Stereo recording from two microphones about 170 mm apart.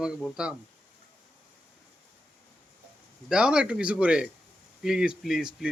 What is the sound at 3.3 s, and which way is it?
A man's voice, 5° right (ahead or behind).